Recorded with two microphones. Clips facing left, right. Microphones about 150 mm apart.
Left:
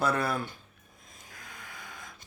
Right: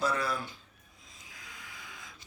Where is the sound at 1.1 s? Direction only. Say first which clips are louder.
Left 3 dB; 55° left (ahead or behind).